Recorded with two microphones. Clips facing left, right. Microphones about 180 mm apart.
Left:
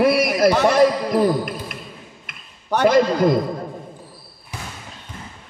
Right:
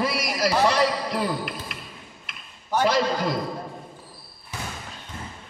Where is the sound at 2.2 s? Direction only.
60° left (ahead or behind).